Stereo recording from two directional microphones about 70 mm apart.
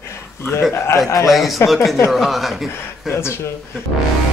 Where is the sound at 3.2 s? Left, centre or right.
Left.